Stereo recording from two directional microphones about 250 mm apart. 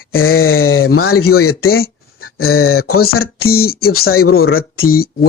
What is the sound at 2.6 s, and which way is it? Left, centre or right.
Speech, left.